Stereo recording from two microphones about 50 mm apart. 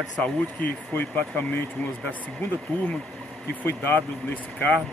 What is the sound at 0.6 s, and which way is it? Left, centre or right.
Speech, left.